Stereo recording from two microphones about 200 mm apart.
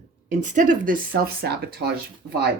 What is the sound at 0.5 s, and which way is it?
Speech, 40° right (ahead or behind).